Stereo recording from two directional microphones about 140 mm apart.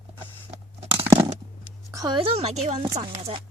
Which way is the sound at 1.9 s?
25° right (ahead or behind).